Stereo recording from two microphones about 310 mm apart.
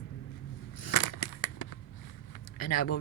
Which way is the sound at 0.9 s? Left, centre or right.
Left.